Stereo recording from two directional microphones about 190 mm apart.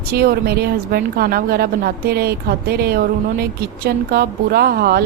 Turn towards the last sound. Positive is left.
turn(degrees=-55)  # may be behind; listen again after turning